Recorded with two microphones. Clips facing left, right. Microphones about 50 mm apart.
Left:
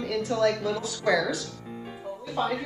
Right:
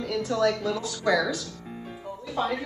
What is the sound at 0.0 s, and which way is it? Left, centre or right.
Speech, centre.